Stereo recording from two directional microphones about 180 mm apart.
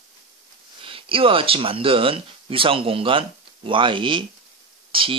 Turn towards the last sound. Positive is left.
turn(degrees=-30)  # may be behind; listen again after turning